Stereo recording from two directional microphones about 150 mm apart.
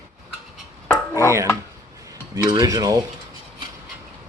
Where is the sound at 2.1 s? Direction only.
20° right (ahead or behind).